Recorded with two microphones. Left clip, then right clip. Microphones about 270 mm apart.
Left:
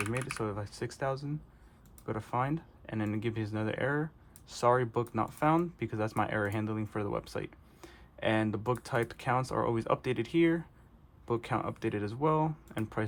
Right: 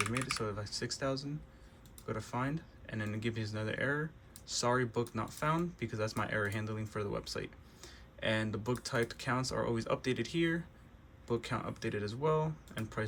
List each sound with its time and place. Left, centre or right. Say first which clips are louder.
0.3 s speech: left 2 dB; left